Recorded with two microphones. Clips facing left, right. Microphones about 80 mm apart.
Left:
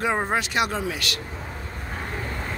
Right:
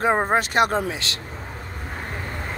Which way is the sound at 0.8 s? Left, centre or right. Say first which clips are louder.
Even; right.